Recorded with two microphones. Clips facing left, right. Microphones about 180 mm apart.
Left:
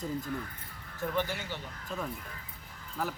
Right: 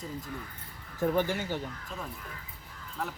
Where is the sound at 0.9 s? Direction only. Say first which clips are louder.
Right 5 dB; 45° right (ahead or behind).